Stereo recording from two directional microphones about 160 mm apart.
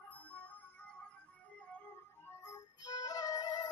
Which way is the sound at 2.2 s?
20° left (ahead or behind).